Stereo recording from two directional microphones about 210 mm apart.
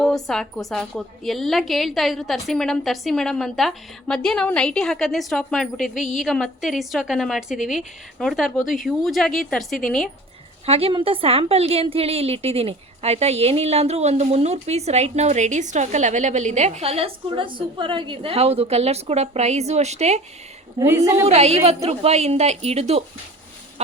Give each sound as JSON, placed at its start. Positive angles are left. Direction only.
{"t": 0.0, "sound": "a woman's voice", "side_deg": 0}
{"t": 10.7, "sound": "a woman's voice", "side_deg": -30}
{"t": 20.7, "sound": "a woman's voice", "side_deg": -15}
{"t": 21.2, "sound": "a woman's voice", "side_deg": -30}